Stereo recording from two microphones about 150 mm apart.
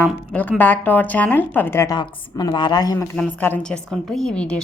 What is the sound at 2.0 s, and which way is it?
Speech, 30° left (ahead or behind).